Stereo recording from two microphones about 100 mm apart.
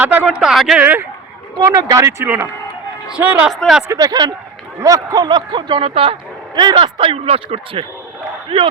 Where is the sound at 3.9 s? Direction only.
40° right (ahead or behind); by 6.2 s 70° right (ahead or behind).